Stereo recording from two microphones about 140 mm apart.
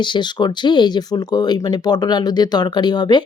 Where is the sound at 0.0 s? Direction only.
35° left (ahead or behind).